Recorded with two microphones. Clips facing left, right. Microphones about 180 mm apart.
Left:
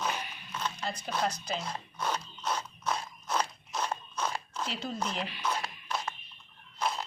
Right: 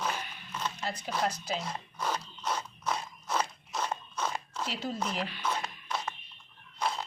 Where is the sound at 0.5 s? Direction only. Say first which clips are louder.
Even; 5° right (ahead or behind).